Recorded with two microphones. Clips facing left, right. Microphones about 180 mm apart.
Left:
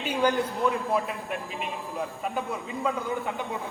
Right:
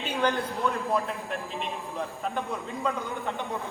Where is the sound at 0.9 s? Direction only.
10° left (ahead or behind).